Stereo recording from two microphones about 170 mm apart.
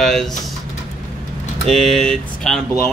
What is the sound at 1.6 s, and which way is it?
Speech, centre (ahead or behind).